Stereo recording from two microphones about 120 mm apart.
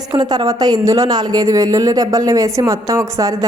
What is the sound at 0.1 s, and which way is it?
A woman's voice, 35° right (ahead or behind).